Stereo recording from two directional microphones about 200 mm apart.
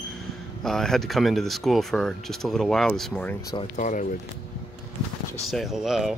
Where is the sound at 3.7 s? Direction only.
40° left (ahead or behind).